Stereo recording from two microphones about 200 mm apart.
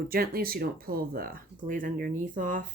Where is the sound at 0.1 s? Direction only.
50° right (ahead or behind).